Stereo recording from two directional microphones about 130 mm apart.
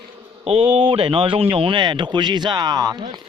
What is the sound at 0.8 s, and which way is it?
Speech, 40° right (ahead or behind).